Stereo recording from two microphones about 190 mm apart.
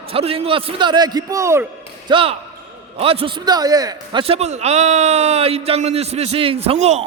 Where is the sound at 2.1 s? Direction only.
25° right (ahead or behind).